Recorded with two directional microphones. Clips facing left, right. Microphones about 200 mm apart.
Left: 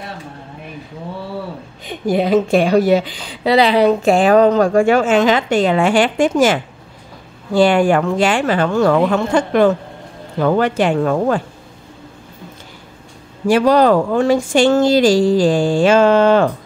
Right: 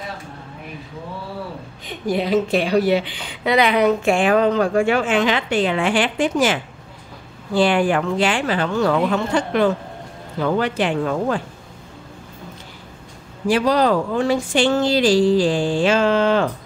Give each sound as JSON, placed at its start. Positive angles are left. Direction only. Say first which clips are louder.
{"t": 2.1, "sound": "speech", "louder": "left 5 dB", "side_deg": 50}
{"t": 13.5, "sound": "speech", "louder": "left 5 dB", "side_deg": 50}